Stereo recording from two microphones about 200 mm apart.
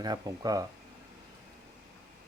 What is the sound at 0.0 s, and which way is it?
Speech, 20° right (ahead or behind).